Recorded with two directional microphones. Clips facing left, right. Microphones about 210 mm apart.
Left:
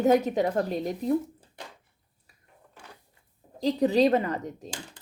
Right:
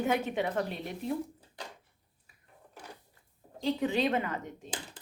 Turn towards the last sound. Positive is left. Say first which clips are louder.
# left 5 dB
turn(degrees=35)  # may be behind; listen again after turning